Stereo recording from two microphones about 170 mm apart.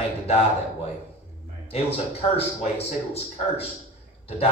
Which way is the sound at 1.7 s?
35° left (ahead or behind).